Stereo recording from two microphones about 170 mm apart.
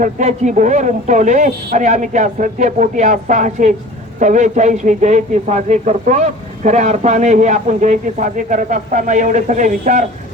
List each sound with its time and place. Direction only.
0.0 s a man's voice: 45° right (ahead or behind)